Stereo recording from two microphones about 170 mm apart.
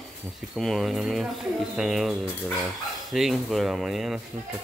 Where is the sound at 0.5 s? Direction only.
Centre (ahead or behind).